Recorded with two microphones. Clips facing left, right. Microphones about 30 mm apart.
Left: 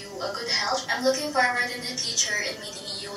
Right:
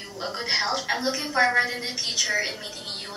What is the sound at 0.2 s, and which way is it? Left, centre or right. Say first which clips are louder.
A woman's voice: right 1 dB; centre.